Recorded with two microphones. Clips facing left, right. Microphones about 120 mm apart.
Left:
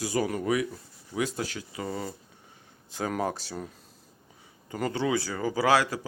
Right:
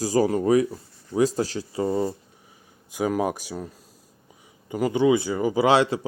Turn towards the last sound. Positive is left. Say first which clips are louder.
# right 5 dB
turn(degrees=-25)  # may be behind; listen again after turning